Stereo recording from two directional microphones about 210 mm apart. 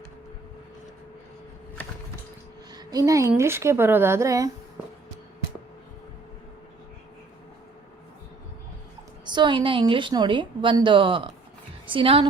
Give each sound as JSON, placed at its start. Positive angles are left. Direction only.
{"t": 2.7, "sound": "speech", "side_deg": -15}
{"t": 9.2, "sound": "a woman's voice", "side_deg": -20}